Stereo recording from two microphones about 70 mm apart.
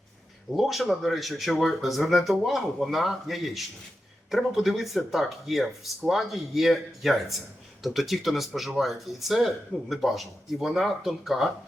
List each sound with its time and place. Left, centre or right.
0.5 s speech: centre